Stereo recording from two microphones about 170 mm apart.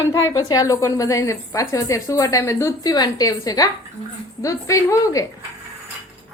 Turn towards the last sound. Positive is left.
turn(degrees=20)  # may be behind; listen again after turning